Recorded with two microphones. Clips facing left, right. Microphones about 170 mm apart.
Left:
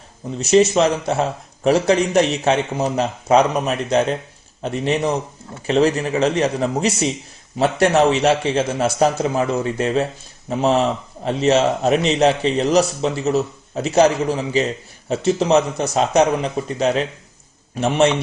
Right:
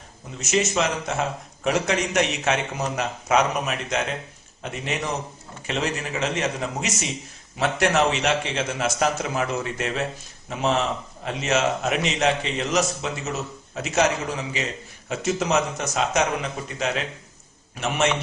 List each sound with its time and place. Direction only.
0.3 s a man's voice: 35° left (ahead or behind)